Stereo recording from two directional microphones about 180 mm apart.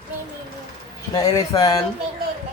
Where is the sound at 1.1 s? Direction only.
20° left (ahead or behind).